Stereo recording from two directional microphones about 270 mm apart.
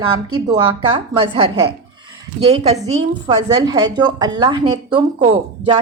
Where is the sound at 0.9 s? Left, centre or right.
Centre.